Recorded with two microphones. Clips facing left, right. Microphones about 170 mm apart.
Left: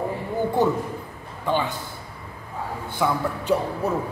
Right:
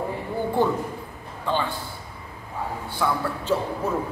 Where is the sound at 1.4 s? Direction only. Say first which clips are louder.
Left 2 dB; 15° left (ahead or behind).